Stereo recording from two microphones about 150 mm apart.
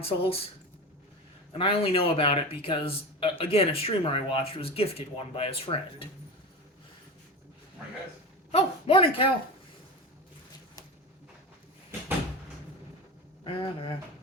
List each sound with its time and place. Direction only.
0.0 s speech: 40° left (ahead or behind)
1.5 s speech: 40° left (ahead or behind)
8.5 s speech: 35° left (ahead or behind)
13.4 s speech: 35° left (ahead or behind)